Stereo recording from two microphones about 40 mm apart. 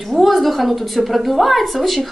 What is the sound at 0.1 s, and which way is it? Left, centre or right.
A woman's voice, centre.